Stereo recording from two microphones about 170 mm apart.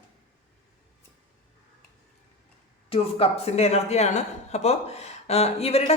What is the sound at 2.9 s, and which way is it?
Speech, 35° left (ahead or behind).